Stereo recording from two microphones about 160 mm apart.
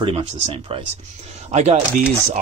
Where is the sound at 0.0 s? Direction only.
35° right (ahead or behind).